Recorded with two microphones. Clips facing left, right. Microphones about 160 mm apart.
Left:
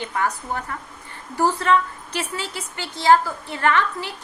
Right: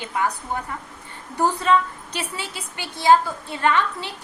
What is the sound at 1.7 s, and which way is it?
A woman's voice, 20° right (ahead or behind).